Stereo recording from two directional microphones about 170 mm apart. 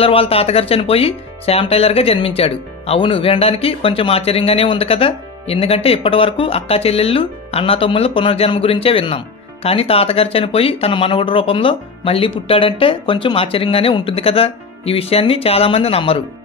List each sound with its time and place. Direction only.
0.0 s speech: 35° left (ahead or behind)